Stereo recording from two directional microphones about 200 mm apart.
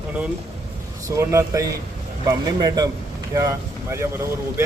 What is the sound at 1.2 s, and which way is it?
Speech, 15° right (ahead or behind).